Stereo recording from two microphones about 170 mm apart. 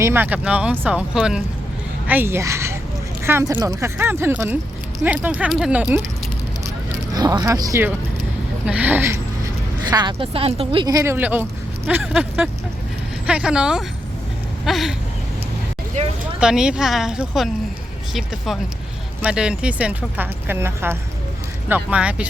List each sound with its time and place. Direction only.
0.0 s speech: 10° right (ahead or behind)
7.1 s speech: 20° right (ahead or behind)
9.9 s speech: 25° right (ahead or behind)
10.9 s a woman's voice: 15° right (ahead or behind)
14.6 s a sound: centre (ahead or behind)
16.4 s a woman's voice: 5° right (ahead or behind)